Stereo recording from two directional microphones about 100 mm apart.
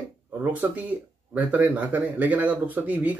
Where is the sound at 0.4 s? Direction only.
15° right (ahead or behind).